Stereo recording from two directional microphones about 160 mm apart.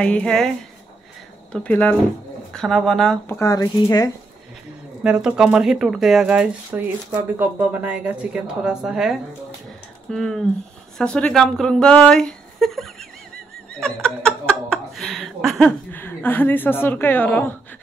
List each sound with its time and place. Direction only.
0.0 s a woman's voice: 5° left (ahead or behind)
1.5 s a woman's voice: 10° left (ahead or behind)
3.3 s speech: 20° left (ahead or behind)
5.0 s a woman's voice: 5° right (ahead or behind)
13.7 s laughter: 5° left (ahead or behind)
15.9 s a woman's voice: 10° left (ahead or behind)